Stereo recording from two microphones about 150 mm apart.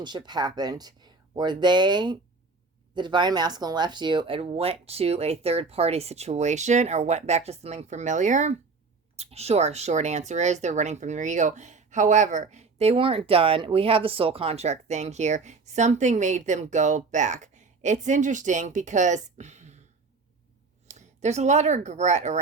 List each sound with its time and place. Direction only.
0.0 s speech: 30° right (ahead or behind); by 19.8 s 50° right (ahead or behind)
20.8 s speech: 50° right (ahead or behind)